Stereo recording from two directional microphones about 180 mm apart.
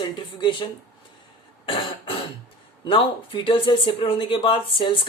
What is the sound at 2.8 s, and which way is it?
Speech, 30° left (ahead or behind).